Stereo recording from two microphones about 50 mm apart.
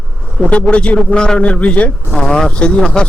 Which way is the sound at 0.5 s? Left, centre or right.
Left.